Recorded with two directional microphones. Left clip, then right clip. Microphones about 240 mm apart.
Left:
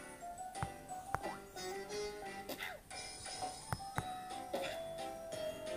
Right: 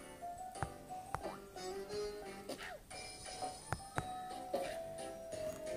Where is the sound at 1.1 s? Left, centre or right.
Centre.